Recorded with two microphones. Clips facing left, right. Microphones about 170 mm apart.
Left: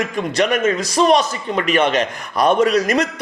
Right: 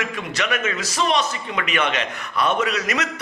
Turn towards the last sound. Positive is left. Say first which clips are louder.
# left 8 dB
turn(degrees=40)  # may be behind; listen again after turning